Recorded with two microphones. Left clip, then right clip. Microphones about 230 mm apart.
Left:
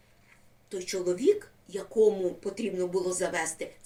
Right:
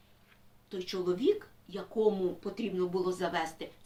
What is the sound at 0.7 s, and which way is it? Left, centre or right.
A woman's voice, centre.